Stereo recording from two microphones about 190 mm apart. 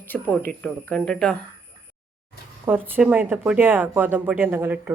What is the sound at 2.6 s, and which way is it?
Speech, 10° right (ahead or behind).